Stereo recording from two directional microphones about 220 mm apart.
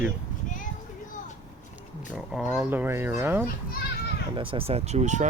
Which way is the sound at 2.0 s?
5° right (ahead or behind).